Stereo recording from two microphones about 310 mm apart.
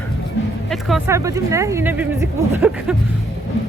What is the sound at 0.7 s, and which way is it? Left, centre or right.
Speech, centre.